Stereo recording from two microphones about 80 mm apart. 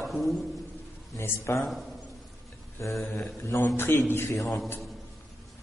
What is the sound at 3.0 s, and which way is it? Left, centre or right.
Speech, left.